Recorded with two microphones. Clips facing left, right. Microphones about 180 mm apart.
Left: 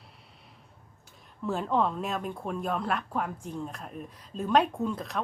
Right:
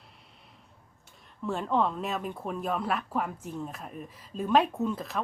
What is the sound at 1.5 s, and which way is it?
Speech, centre (ahead or behind).